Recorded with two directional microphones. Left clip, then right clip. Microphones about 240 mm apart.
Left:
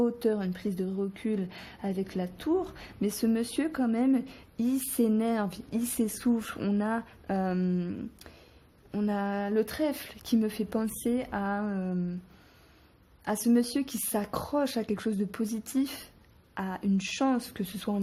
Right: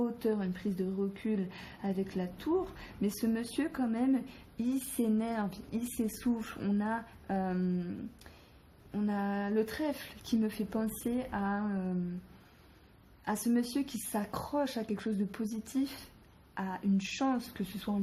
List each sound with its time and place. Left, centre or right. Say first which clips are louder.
0.0 s a woman's voice: left 5 dB; left
13.2 s a woman's voice: left 6 dB; left